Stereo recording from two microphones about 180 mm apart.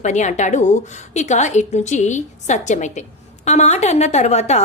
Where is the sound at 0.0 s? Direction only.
40° left (ahead or behind).